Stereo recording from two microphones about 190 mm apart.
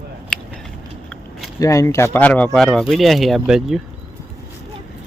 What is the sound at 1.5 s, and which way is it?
Speech, 15° left (ahead or behind).